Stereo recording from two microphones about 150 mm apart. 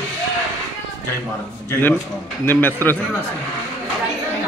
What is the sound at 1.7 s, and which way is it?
A man's voice, 15° left (ahead or behind).